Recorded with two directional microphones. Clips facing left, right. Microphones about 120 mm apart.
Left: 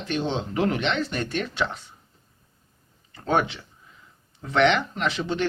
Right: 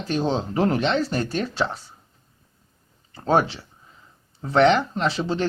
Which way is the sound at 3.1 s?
35° right (ahead or behind).